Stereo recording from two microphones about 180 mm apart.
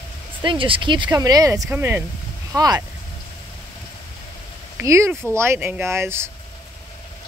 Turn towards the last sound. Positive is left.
turn(degrees=-15)  # may be behind; listen again after turning